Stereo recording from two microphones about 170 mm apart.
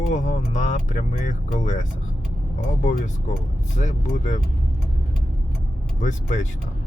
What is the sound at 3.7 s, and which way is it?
Speech, 45° left (ahead or behind).